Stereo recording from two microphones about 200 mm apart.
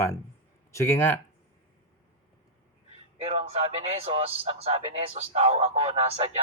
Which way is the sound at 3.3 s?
30° right (ahead or behind).